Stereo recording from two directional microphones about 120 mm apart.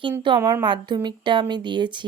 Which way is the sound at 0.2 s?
40° right (ahead or behind).